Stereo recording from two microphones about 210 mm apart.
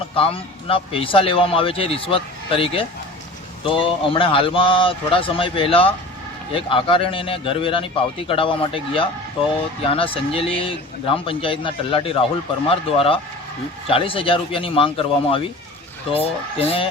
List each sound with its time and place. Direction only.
0.2 s a man's voice: 25° left (ahead or behind)